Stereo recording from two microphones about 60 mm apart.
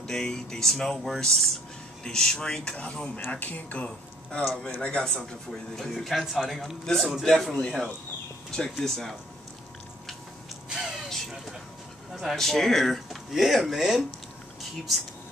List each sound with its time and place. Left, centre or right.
0.0 s speech: centre
10.7 s music: centre
11.1 s a sound: centre
12.1 s speech: centre